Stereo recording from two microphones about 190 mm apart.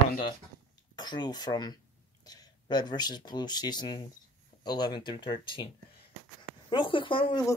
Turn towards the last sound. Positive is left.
turn(degrees=25)  # may be behind; listen again after turning